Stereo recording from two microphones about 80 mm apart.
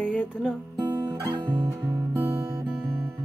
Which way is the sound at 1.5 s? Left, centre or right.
Right.